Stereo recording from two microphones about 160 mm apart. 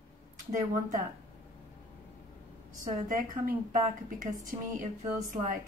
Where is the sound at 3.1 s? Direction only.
60° right (ahead or behind).